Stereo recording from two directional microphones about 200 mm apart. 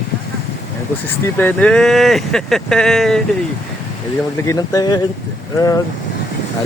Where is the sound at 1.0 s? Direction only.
10° left (ahead or behind).